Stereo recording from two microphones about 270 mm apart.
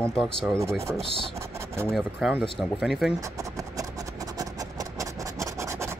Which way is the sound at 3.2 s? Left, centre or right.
Centre.